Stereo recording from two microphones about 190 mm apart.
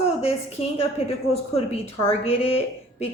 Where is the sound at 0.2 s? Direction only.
30° left (ahead or behind).